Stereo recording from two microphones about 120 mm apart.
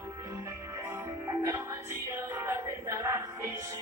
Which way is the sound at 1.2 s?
25° right (ahead or behind).